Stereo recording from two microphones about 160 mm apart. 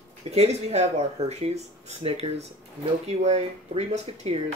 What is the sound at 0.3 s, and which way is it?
Speech, 40° right (ahead or behind).